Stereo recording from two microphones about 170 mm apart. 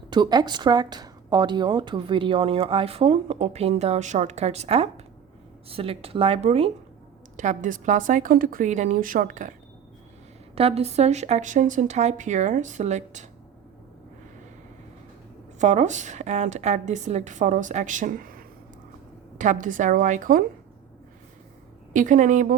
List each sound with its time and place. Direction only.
0.1 s speech: 25° right (ahead or behind)
7.3 s a woman's voice: 50° right (ahead or behind)
10.5 s a woman's voice: 35° right (ahead or behind)
15.5 s a woman's voice: 45° right (ahead or behind)
19.4 s a woman's voice: 50° right (ahead or behind)
21.9 s a woman's voice: 50° right (ahead or behind)